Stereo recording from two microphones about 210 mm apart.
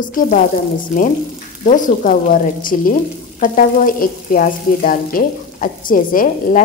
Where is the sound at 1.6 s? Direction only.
40° left (ahead or behind).